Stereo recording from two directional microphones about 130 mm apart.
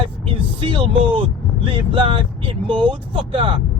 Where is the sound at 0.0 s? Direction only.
40° right (ahead or behind).